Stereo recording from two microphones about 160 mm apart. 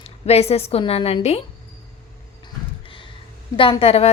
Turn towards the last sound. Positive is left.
turn(degrees=40)  # may be behind; listen again after turning